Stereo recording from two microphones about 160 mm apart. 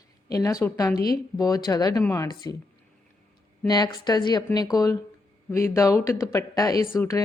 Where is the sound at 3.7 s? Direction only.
25° left (ahead or behind).